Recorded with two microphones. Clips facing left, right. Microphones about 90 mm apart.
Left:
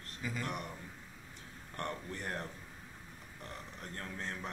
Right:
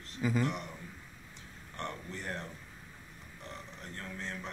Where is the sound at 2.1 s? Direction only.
45° left (ahead or behind).